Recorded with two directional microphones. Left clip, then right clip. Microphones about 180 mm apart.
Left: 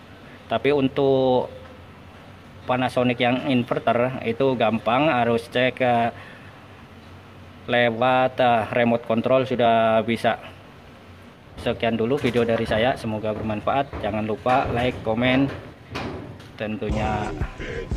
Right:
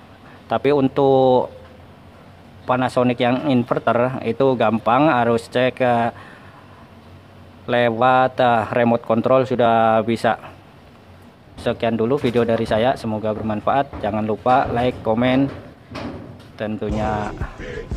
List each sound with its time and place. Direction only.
0.5 s speech: 25° right (ahead or behind)
2.6 s speech: 20° right (ahead or behind)
7.6 s speech: 20° right (ahead or behind)
11.5 s speech: 20° right (ahead or behind)
16.5 s speech: 15° right (ahead or behind)
16.9 s speech: centre (ahead or behind)
17.6 s music: centre (ahead or behind)